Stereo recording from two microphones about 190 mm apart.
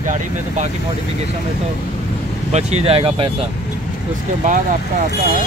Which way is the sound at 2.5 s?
35° right (ahead or behind).